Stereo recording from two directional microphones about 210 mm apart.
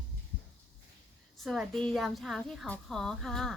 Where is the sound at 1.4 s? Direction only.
Centre (ahead or behind).